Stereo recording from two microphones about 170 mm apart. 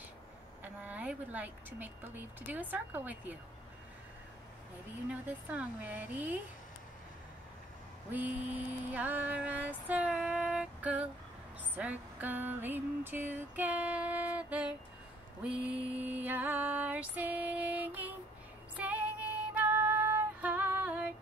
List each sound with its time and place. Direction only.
0.8 s speech: 10° right (ahead or behind)
5.1 s speech: 10° right (ahead or behind)
8.1 s a sound: 10° right (ahead or behind)
15.4 s music: 5° right (ahead or behind)